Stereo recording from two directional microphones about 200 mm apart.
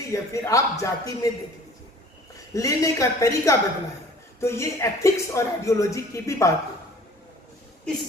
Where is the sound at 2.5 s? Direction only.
15° left (ahead or behind).